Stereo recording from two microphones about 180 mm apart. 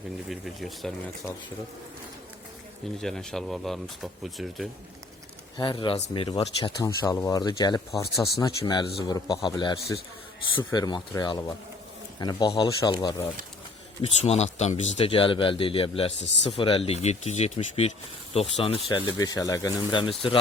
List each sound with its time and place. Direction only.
0.3 s speech: centre (ahead or behind)
3.0 s speech: 5° left (ahead or behind)
5.5 s speech: 25° left (ahead or behind)